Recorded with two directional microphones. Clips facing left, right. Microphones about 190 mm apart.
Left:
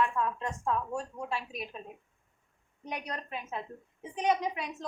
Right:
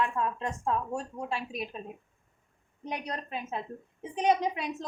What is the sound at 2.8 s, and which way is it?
A woman's voice, 25° right (ahead or behind).